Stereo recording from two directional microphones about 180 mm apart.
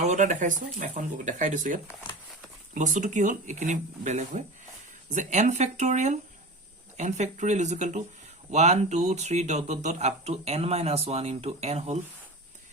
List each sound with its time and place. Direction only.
0.0 s speech: 40° right (ahead or behind)